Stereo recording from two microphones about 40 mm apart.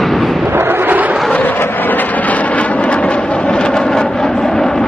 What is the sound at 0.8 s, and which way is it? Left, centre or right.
Vehicle, right.